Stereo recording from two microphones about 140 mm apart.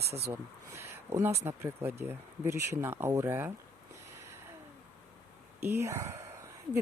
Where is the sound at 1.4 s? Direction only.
15° right (ahead or behind).